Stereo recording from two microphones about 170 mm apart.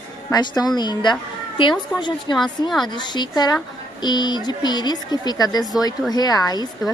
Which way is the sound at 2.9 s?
25° left (ahead or behind).